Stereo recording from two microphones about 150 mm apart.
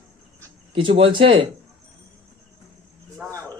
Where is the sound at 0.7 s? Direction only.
35° right (ahead or behind).